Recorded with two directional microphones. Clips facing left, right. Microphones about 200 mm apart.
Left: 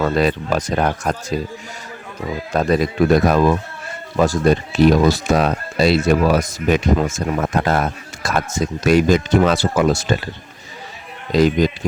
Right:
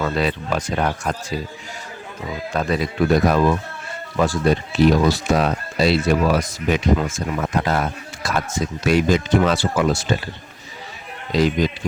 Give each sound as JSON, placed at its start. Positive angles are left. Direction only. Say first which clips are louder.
{"t": 0.0, "sound": "speech", "louder": "left 4 dB", "side_deg": 45}
{"t": 2.5, "sound": "speech", "louder": "left 5 dB", "side_deg": 40}
{"t": 11.3, "sound": "speech", "louder": "left 4 dB", "side_deg": 45}